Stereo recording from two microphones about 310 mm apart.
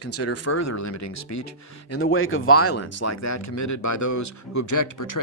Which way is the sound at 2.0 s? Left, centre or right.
Left.